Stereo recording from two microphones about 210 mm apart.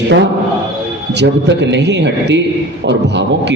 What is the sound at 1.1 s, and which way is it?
A man's voice, 55° right (ahead or behind).